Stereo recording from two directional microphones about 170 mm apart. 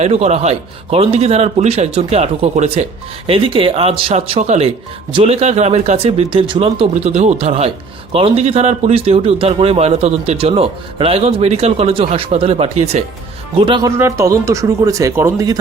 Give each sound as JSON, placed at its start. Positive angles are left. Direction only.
{"t": 0.0, "sound": "a man's voice", "side_deg": -40}
{"t": 6.9, "sound": "a man's voice", "side_deg": -40}
{"t": 13.6, "sound": "speech", "side_deg": -30}
{"t": 14.0, "sound": "speech", "side_deg": -20}